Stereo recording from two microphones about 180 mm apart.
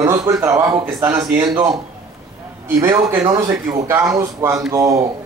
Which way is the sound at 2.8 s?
20° right (ahead or behind).